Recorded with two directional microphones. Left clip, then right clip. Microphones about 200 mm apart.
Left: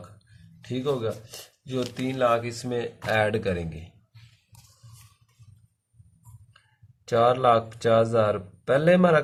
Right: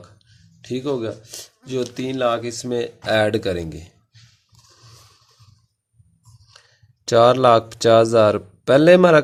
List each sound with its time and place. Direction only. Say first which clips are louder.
0.6 s speech: right 3 dB; 50° right (ahead or behind)
7.0 s speech: right 7 dB; 50° right (ahead or behind)